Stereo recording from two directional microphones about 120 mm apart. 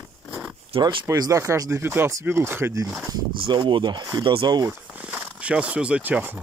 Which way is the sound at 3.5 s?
40° right (ahead or behind).